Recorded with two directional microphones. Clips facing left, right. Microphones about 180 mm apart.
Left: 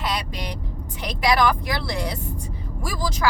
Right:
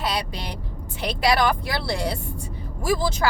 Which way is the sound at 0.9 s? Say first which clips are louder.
Even; 30° right (ahead or behind).